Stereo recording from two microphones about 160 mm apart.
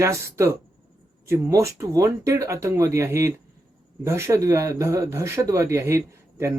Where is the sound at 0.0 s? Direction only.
20° right (ahead or behind).